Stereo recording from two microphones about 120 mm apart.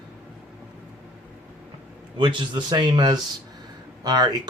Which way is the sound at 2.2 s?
40° right (ahead or behind).